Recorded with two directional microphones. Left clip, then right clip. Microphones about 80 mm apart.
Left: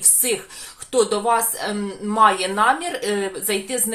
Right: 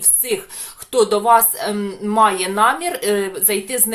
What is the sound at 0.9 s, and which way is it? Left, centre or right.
Speech, right.